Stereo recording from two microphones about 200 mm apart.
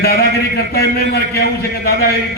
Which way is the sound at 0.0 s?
50° left (ahead or behind).